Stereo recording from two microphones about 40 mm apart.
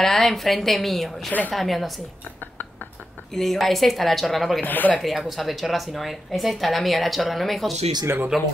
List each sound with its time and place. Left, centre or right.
0.0 s a woman's voice: centre
3.3 s a woman's voice: centre
4.6 s speech: left
4.9 s a woman's voice: centre
8.3 s speech: centre